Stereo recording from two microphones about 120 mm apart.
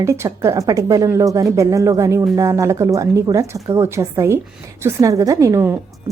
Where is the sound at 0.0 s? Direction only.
25° right (ahead or behind).